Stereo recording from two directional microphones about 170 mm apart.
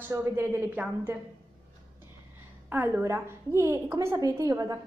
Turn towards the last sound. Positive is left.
turn(degrees=-20)  # may be behind; listen again after turning